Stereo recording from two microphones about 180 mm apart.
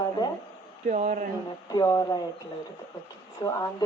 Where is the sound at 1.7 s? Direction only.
20° left (ahead or behind).